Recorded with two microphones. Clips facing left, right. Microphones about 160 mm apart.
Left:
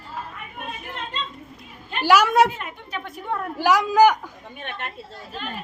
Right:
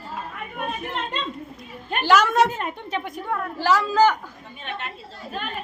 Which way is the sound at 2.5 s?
35° right (ahead or behind).